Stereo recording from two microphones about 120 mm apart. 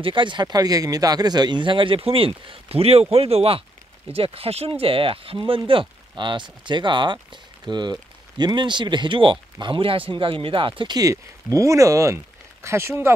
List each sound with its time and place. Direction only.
0.0 s speech: 40° right (ahead or behind)
11.0 s speech: 30° right (ahead or behind)